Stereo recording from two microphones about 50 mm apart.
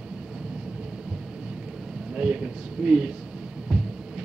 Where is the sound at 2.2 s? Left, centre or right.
Right.